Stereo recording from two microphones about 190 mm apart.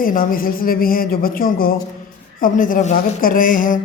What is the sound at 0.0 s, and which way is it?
Speech, 50° left (ahead or behind).